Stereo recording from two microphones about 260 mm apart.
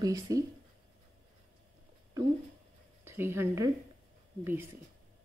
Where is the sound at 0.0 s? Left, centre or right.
Centre.